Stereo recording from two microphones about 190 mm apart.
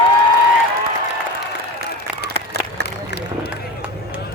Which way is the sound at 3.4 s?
10° right (ahead or behind).